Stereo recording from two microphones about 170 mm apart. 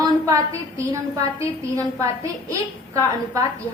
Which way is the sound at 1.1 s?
20° right (ahead or behind).